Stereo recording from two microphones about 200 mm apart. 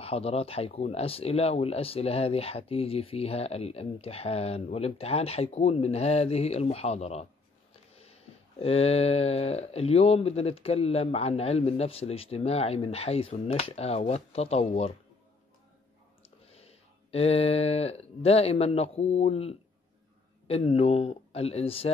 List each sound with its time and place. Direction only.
0.0 s speech: 30° left (ahead or behind)
16.5 s speech: 30° left (ahead or behind)